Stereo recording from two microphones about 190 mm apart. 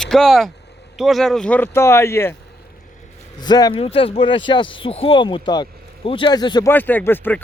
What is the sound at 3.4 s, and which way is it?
Speech, 20° left (ahead or behind).